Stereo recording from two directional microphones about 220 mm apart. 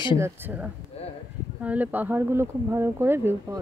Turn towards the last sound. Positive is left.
turn(degrees=-10)  # may be behind; listen again after turning